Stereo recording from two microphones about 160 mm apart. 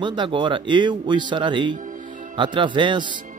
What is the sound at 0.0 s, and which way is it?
A man's voice, 30° right (ahead or behind).